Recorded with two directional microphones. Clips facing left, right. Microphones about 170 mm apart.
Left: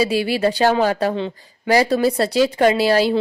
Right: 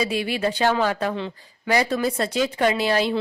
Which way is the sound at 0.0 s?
35° left (ahead or behind).